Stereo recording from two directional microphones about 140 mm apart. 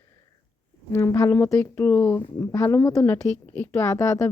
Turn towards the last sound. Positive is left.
turn(degrees=20)  # may be behind; listen again after turning